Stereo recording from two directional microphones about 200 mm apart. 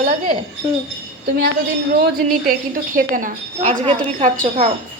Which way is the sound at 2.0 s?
50° right (ahead or behind).